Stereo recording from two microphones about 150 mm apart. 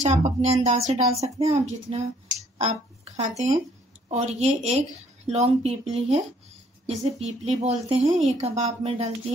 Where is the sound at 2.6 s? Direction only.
45° right (ahead or behind).